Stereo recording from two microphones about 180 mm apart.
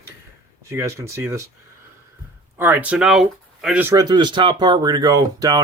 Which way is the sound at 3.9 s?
20° right (ahead or behind).